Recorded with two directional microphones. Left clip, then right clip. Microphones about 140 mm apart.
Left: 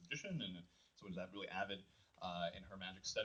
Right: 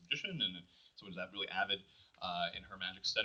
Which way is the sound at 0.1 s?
45° left (ahead or behind).